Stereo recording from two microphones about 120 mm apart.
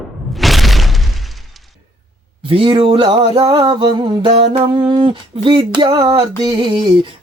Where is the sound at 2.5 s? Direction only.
50° right (ahead or behind).